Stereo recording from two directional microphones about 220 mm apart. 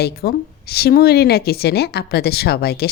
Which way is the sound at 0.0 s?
45° left (ahead or behind).